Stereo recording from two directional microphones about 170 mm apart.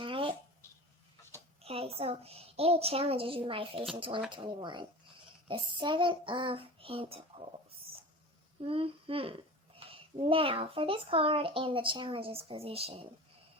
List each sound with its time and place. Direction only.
0.0 s a sound: 30° right (ahead or behind)
1.6 s a child's voice: 35° right (ahead or behind)
8.6 s a child's voice: 35° right (ahead or behind)